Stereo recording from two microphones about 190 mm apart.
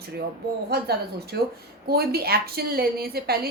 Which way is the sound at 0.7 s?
55° right (ahead or behind).